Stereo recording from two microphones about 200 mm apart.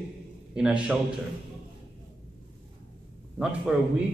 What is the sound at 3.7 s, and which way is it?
Speech, 5° right (ahead or behind).